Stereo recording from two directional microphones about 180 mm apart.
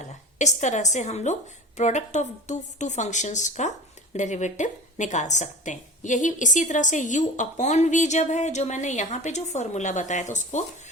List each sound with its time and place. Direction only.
0.3 s a woman's voice: 40° left (ahead or behind)